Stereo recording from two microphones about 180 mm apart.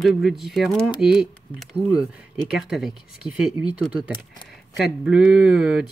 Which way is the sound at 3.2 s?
25° left (ahead or behind).